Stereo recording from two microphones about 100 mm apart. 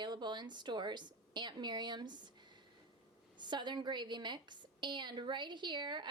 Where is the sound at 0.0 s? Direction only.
50° right (ahead or behind).